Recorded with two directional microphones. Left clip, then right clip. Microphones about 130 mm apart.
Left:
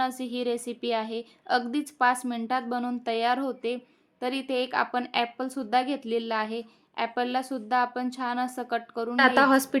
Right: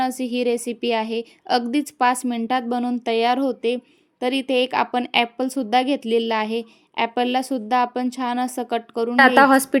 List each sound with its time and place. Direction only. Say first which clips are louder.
0.0 s a woman's voice: right 7 dB; 50° right (ahead or behind)
9.1 s a woman's voice: right 7 dB; 35° right (ahead or behind)